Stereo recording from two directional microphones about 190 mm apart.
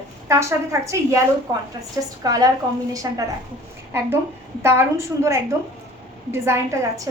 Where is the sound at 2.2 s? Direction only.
20° right (ahead or behind).